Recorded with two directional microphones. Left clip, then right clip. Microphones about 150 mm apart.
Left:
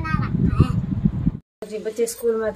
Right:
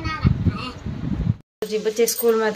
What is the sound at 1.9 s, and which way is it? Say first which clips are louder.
Speech: right 2 dB; 10° left (ahead or behind).